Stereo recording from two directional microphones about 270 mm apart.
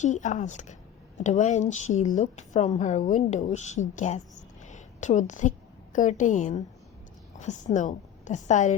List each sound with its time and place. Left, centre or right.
0.0 s a woman's voice: left